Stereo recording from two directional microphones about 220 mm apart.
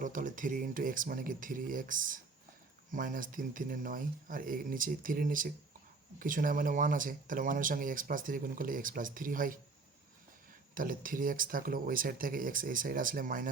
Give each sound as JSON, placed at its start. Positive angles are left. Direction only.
{"t": 0.0, "sound": "speech", "side_deg": -35}
{"t": 10.8, "sound": "speech", "side_deg": -40}